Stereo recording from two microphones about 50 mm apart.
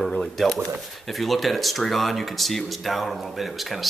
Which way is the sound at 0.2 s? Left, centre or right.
Centre.